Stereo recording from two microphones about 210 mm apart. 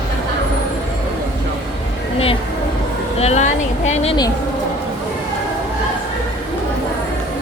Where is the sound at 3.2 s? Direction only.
30° left (ahead or behind).